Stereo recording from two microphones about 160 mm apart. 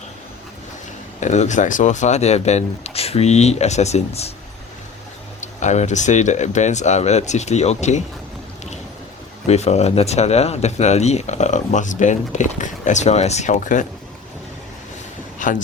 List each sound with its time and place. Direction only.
1.2 s speech: 45° left (ahead or behind)
5.4 s speech: 50° left (ahead or behind)
9.5 s speech: 40° left (ahead or behind)
15.4 s a man's voice: 55° left (ahead or behind)